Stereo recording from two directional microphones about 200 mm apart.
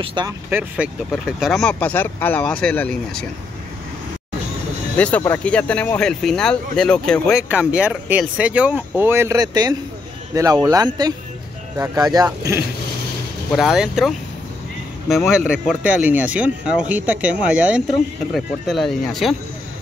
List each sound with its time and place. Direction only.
0.0 s speech: 25° right (ahead or behind)
0.5 s speech: 10° right (ahead or behind)
4.9 s speech: 5° left (ahead or behind)
7.4 s speech: 5° right (ahead or behind)
13.6 s speech: centre (ahead or behind)